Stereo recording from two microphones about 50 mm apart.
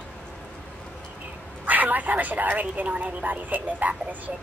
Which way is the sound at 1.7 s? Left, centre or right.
Right.